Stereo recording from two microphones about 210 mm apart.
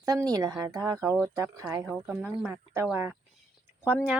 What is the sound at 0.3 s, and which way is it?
Speech, 20° right (ahead or behind).